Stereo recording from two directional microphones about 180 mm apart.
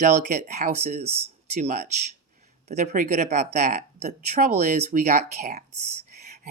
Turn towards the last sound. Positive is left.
turn(degrees=-40)  # may be behind; listen again after turning